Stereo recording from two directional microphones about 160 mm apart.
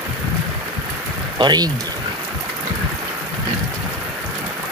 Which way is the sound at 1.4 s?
25° right (ahead or behind).